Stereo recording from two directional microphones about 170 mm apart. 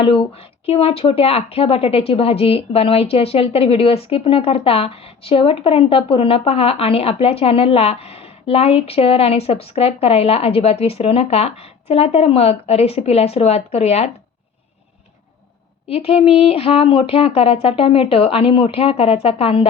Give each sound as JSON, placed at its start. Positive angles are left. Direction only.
{"t": 0.0, "sound": "speech", "side_deg": 35}
{"t": 15.9, "sound": "speech", "side_deg": 35}